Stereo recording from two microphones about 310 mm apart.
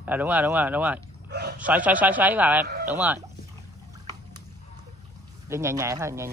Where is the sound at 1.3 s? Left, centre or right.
Right.